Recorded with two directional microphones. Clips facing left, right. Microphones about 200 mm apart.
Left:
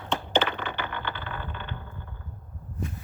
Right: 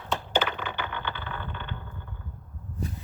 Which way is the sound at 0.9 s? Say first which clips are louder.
Even; 10° left (ahead or behind).